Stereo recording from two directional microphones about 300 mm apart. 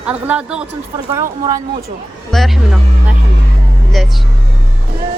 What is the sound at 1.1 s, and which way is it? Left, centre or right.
Speech, centre.